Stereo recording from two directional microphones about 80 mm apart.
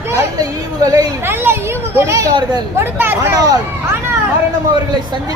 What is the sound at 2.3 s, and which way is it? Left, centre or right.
Speech, right.